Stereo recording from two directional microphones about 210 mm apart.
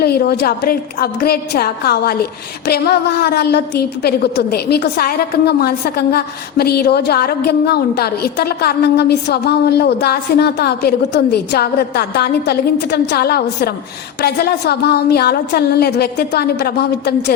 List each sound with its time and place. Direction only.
0.0 s a woman's voice: 50° left (ahead or behind)